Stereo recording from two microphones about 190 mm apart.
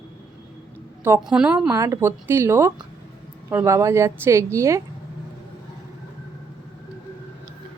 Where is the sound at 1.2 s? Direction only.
5° right (ahead or behind).